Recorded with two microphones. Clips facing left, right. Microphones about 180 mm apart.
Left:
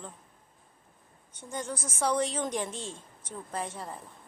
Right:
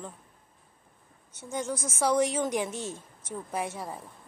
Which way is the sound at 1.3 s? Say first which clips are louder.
Right 4 dB; 10° right (ahead or behind).